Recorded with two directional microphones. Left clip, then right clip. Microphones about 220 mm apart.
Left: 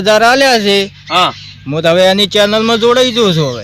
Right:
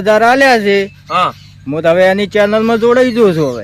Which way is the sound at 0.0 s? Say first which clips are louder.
Even; 25° left (ahead or behind).